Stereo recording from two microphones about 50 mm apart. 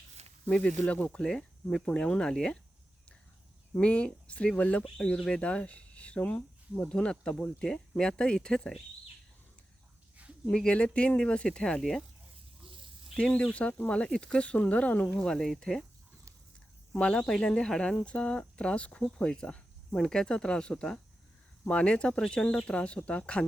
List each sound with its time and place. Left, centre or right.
0.6 s speech: left
1.2 s speech: centre
1.8 s speech: left
3.8 s speech: left
4.9 s speech: centre
10.5 s speech: centre
13.1 s speech: centre
15.4 s speech: centre
17.0 s speech: left
17.2 s speech: centre